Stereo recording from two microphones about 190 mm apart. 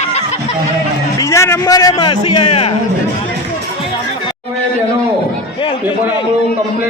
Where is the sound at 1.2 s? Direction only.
15° left (ahead or behind); by 2.7 s 30° left (ahead or behind).